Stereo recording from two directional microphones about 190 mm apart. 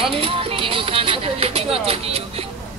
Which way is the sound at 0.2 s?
30° right (ahead or behind).